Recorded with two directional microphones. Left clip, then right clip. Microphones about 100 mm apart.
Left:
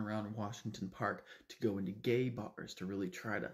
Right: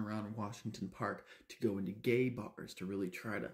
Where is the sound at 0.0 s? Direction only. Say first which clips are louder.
Left 1 dB; 25° right (ahead or behind).